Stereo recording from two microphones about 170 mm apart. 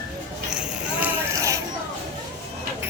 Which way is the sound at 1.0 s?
20° right (ahead or behind).